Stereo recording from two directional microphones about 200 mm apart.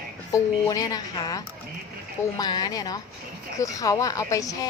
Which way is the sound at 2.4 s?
20° left (ahead or behind).